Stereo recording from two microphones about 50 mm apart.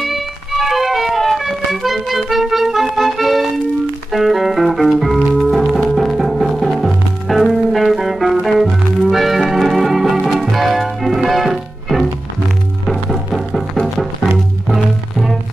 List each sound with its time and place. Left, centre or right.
0.0 s music: centre
14.7 s music: centre